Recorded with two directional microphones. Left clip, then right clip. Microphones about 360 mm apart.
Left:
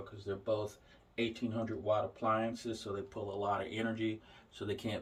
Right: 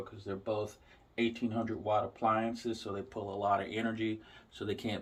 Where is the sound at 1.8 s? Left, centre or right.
Centre.